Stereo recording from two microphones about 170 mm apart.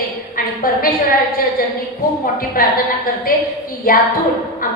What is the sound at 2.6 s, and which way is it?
A woman's voice, 60° left (ahead or behind).